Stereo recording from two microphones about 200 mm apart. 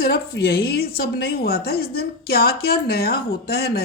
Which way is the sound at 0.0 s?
55° left (ahead or behind).